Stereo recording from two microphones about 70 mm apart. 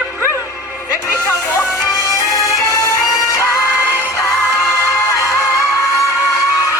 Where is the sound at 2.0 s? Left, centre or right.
Left.